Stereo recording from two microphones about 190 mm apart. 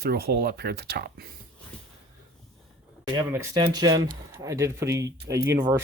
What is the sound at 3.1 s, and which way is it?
Speech, 20° right (ahead or behind).